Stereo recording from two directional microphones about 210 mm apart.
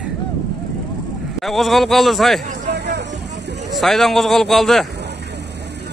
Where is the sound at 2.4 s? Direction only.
35° right (ahead or behind).